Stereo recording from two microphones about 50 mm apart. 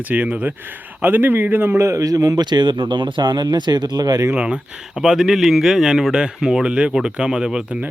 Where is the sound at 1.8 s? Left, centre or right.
Right.